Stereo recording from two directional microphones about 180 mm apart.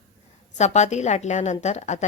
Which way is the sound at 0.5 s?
40° left (ahead or behind).